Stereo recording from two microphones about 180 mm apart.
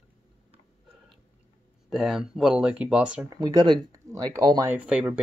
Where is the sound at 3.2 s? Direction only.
20° right (ahead or behind).